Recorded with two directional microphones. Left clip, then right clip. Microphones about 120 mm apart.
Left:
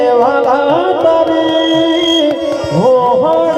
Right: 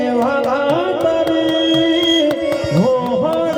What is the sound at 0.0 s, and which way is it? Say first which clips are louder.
Music: left 7 dB; 35° left (ahead or behind).